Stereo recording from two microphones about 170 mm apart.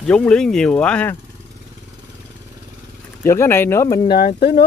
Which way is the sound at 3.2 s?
15° left (ahead or behind).